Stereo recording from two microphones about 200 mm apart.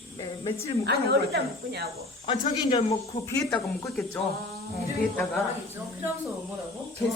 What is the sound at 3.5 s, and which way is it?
Speech, 15° left (ahead or behind).